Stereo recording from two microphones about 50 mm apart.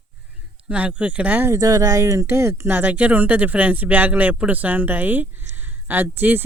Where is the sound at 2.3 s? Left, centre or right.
Right.